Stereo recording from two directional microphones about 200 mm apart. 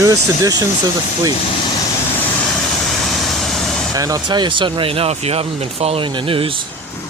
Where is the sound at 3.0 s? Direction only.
Centre (ahead or behind).